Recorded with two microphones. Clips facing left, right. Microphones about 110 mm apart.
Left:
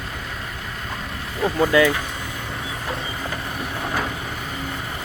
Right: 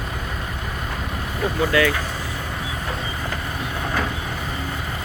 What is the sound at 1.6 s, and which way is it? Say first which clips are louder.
Speech: left 3 dB; 15° left (ahead or behind).